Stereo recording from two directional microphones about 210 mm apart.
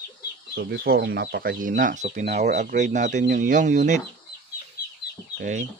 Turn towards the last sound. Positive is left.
turn(degrees=-35)  # may be behind; listen again after turning